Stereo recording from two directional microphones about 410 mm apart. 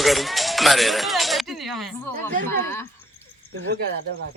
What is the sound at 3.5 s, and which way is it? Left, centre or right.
Speech, right.